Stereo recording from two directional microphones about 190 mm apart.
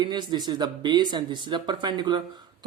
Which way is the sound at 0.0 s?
25° right (ahead or behind).